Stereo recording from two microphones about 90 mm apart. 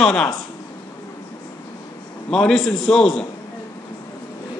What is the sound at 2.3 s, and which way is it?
Speech, 10° left (ahead or behind).